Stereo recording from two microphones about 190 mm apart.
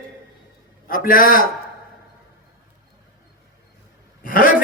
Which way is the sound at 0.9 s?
45° left (ahead or behind).